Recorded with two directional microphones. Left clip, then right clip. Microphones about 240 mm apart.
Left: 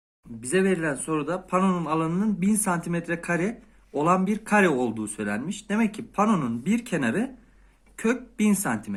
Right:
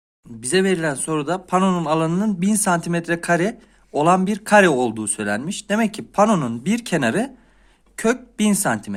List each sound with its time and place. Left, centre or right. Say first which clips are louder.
0.4 s speech: right 5 dB; right